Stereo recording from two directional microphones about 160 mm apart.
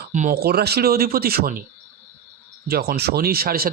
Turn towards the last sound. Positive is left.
turn(degrees=-70)  # may be behind; listen again after turning